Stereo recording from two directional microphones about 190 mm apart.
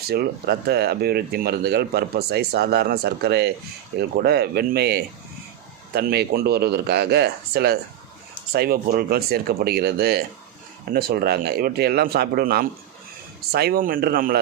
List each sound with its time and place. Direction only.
0.1 s speech: 55° right (ahead or behind)